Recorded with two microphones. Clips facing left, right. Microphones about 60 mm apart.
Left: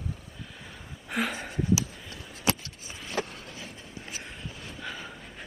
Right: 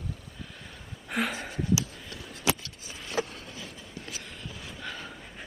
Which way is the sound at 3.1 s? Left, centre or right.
Left.